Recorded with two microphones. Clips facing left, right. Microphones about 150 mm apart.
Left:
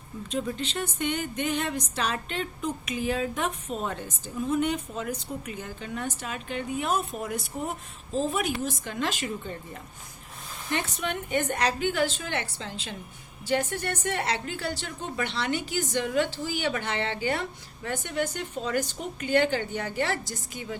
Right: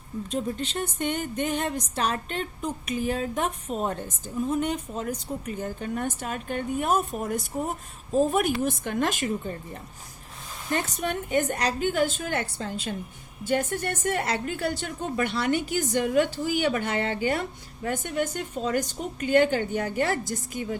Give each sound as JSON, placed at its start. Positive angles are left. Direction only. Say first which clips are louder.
{"t": 0.3, "sound": "a woman's voice", "louder": "even", "side_deg": -45}
{"t": 10.7, "sound": "a woman's voice", "louder": "right 2 dB", "side_deg": -45}